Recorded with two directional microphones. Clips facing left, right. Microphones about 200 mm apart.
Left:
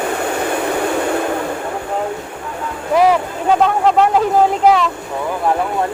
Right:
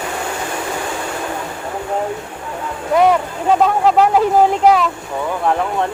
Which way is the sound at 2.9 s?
Centre (ahead or behind).